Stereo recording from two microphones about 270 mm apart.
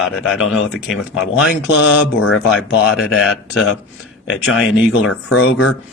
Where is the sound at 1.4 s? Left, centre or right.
Left.